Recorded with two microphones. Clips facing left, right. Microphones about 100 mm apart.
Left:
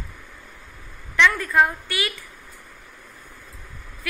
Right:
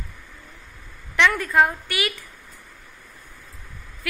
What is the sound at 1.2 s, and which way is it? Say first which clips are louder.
Speech: even; 20° right (ahead or behind).